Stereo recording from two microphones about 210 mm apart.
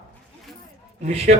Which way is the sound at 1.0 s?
30° right (ahead or behind).